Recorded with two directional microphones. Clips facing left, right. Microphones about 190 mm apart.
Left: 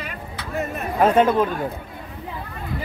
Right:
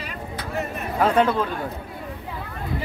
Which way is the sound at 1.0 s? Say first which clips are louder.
Left 3 dB; 20° left (ahead or behind).